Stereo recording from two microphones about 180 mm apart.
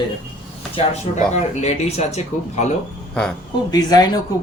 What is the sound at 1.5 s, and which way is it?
Speech, 40° left (ahead or behind).